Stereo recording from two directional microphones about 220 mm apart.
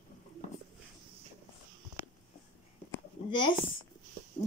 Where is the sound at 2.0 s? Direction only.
10° right (ahead or behind).